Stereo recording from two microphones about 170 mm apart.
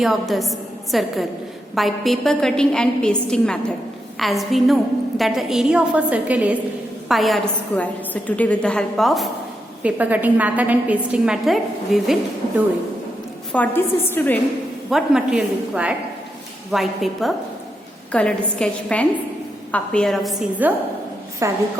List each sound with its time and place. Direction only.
0.0 s a woman's voice: centre (ahead or behind)
13.5 s a woman's voice: 10° left (ahead or behind)
14.8 s a woman's voice: centre (ahead or behind)
20.6 s a woman's voice: 10° right (ahead or behind)